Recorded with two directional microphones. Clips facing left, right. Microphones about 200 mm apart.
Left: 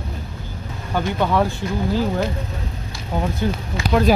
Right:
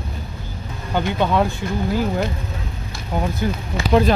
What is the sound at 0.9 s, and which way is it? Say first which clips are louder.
Speech: right 1 dB; 20° right (ahead or behind).